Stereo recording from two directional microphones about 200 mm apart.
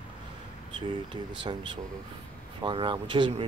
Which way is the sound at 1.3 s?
25° right (ahead or behind).